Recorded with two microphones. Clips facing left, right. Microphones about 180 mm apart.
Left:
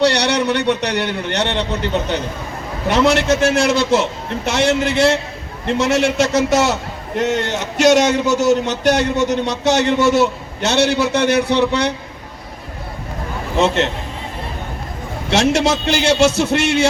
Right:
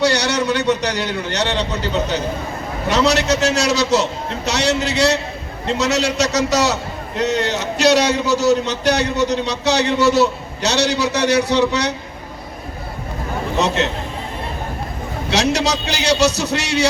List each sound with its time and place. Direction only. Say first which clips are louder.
0.0 s a man's voice: left 2 dB; 65° left (ahead or behind)
15.3 s a man's voice: left 3 dB; 50° left (ahead or behind)